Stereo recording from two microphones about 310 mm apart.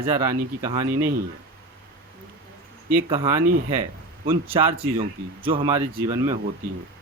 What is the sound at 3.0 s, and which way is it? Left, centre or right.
Speech, centre.